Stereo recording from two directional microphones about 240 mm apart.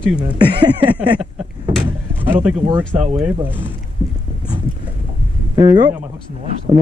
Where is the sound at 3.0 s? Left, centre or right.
Right.